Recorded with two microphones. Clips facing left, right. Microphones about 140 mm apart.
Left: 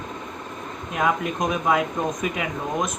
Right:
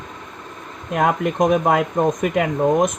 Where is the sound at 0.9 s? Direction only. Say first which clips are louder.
Right 5 dB; 55° right (ahead or behind).